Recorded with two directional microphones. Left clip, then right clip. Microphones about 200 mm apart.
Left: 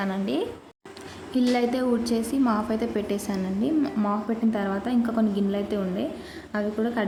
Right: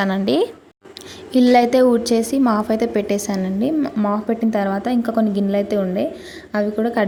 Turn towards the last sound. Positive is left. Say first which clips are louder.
# right 8 dB
turn(degrees=-35)  # may be behind; listen again after turning